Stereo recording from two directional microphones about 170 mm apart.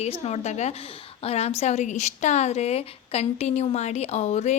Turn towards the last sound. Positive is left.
turn(degrees=40)  # may be behind; listen again after turning